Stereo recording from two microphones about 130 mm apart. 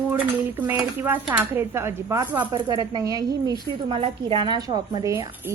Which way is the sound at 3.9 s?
45° right (ahead or behind).